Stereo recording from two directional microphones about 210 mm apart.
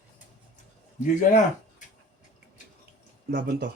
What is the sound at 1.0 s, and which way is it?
Speech, 35° left (ahead or behind).